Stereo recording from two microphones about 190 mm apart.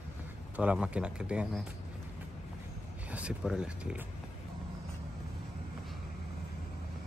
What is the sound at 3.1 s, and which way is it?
Speech, 5° right (ahead or behind).